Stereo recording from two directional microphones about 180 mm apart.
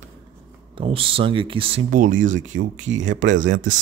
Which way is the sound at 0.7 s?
30° right (ahead or behind).